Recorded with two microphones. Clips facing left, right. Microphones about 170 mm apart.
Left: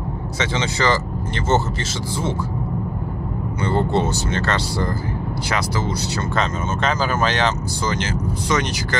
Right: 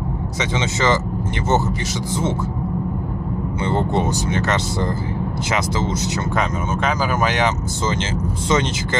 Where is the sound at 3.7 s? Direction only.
20° right (ahead or behind).